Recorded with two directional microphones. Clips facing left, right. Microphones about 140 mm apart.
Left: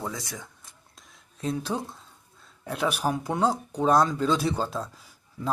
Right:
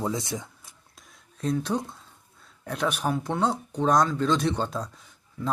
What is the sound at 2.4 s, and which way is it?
A man's voice, centre (ahead or behind).